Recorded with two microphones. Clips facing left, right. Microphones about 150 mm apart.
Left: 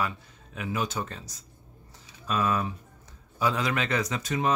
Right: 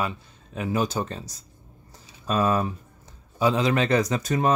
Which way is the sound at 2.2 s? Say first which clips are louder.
Right 4 dB; 35° right (ahead or behind).